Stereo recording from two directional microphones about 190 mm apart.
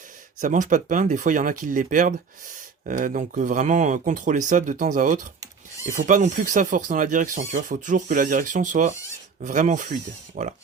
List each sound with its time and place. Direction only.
0.3 s speech: 40° right (ahead or behind)